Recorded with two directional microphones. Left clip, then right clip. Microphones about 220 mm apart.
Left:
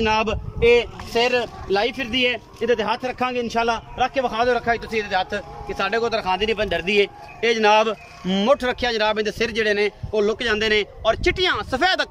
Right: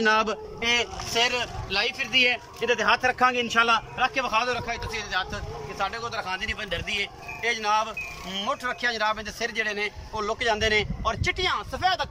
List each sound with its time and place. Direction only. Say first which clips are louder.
0.0 s speech: left 2 dB; 10° left (ahead or behind)
1.8 s a man's voice: left 1 dB; 35° left (ahead or behind)
2.7 s a man's voice: even; 20° left (ahead or behind); by 12.1 s 45° left (ahead or behind)